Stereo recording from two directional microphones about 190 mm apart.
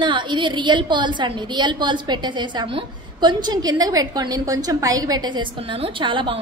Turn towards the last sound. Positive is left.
turn(degrees=-25)  # may be behind; listen again after turning